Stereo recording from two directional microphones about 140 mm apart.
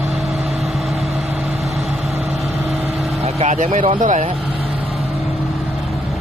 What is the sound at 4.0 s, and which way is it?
Speech, 65° right (ahead or behind).